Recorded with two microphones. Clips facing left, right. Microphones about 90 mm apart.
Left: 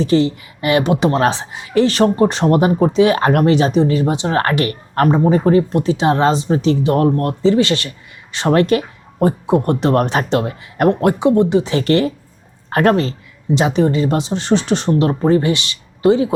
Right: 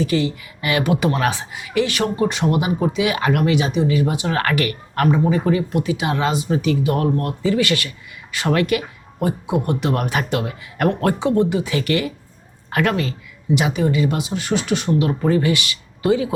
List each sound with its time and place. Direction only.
0.0 s speech: 30° left (ahead or behind)
11.8 s speech: 35° left (ahead or behind)